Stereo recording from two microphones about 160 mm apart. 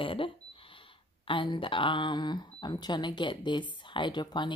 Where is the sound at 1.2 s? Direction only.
30° left (ahead or behind).